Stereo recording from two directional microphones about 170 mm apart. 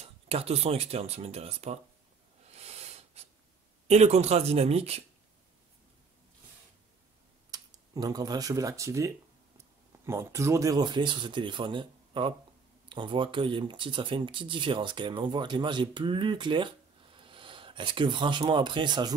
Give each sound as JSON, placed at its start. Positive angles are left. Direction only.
{"t": 0.0, "sound": "speech", "side_deg": -35}
{"t": 2.5, "sound": "a sound", "side_deg": -40}
{"t": 3.8, "sound": "speech", "side_deg": -40}
{"t": 7.5, "sound": "speech", "side_deg": -20}